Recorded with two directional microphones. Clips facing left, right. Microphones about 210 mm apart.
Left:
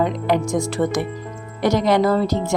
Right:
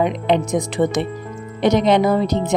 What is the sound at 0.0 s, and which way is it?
Speech, 20° right (ahead or behind).